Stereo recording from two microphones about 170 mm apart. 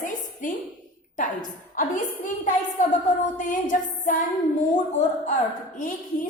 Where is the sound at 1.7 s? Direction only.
50° left (ahead or behind).